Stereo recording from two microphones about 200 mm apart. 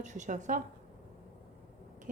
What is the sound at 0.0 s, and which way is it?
Speech, 35° right (ahead or behind).